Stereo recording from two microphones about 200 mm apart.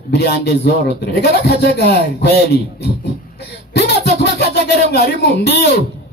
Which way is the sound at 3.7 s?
55° left (ahead or behind).